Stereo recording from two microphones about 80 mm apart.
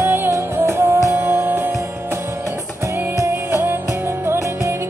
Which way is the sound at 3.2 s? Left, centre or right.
Right.